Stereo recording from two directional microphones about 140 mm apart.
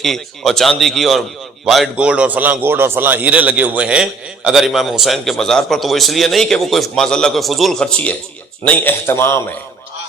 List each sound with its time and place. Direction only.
0.0 s a man's voice: centre (ahead or behind); by 9.4 s 20° left (ahead or behind)